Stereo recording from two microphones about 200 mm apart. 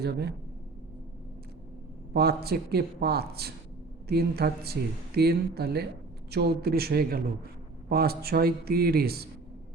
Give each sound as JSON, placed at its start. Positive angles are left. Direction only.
{"t": 0.0, "sound": "speech", "side_deg": -55}
{"t": 2.1, "sound": "speech", "side_deg": -50}